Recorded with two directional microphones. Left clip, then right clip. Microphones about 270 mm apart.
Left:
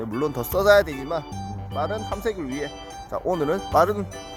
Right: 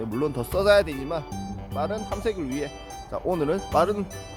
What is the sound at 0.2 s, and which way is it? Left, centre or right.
Speech, centre.